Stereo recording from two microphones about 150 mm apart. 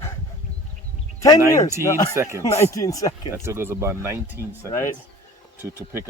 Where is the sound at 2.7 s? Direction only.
20° left (ahead or behind).